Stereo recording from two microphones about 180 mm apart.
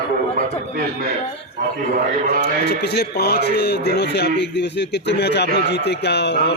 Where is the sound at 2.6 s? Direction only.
65° left (ahead or behind).